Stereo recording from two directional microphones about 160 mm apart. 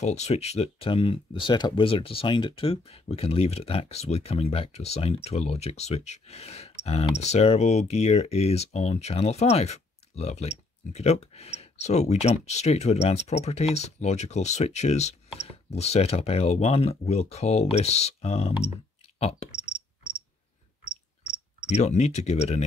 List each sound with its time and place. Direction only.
0.0 s speech: 45° left (ahead or behind)
21.6 s speech: 45° left (ahead or behind)